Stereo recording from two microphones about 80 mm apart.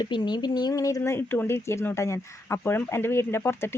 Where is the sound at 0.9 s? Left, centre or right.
Left.